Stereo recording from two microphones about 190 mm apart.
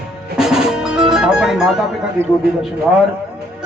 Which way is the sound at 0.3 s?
Centre (ahead or behind).